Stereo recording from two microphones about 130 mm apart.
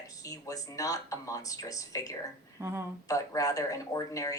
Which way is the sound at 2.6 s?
20° right (ahead or behind).